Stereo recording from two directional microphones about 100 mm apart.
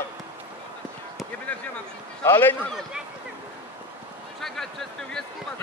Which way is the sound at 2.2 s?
20° left (ahead or behind).